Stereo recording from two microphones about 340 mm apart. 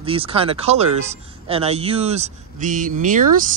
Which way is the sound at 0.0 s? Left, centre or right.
Centre.